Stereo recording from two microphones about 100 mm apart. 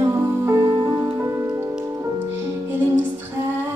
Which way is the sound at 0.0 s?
30° right (ahead or behind).